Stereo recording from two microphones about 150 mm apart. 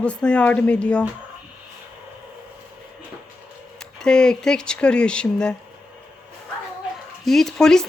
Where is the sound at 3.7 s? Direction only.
5° left (ahead or behind).